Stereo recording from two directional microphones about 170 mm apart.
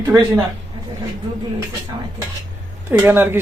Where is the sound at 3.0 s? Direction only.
10° right (ahead or behind).